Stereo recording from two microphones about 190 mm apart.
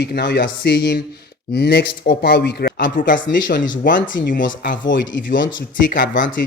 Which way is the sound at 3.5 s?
75° left (ahead or behind).